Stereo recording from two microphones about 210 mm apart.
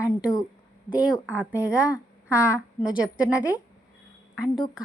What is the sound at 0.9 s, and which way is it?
Speech, 5° right (ahead or behind).